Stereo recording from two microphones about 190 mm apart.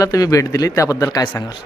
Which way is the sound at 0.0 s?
20° left (ahead or behind).